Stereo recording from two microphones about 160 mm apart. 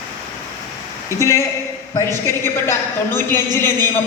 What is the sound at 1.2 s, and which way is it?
A woman's voice, 20° left (ahead or behind).